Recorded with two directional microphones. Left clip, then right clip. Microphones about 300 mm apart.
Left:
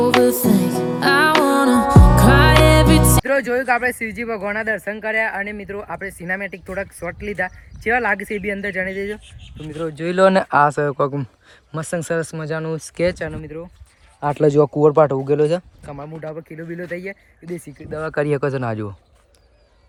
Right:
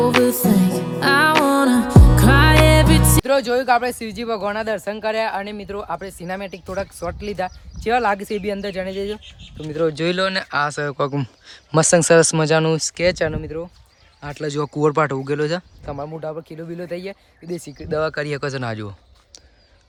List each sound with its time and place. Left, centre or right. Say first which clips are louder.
0.3 s music: left 1 dB; centre
4.2 s speech: right 3 dB; centre
9.6 s speech: right 6 dB; right
10.2 s speech: left 7 dB; centre
13.1 s speech: right 5 dB; right
14.2 s speech: left 10 dB; centre
15.8 s speech: right 3 dB; right
18.0 s speech: left 6 dB; centre